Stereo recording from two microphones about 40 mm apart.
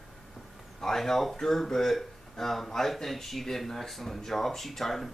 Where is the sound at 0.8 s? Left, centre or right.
Centre.